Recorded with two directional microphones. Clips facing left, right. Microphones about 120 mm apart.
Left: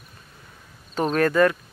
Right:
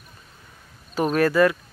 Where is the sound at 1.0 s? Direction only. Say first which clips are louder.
Right 1 dB; 5° right (ahead or behind).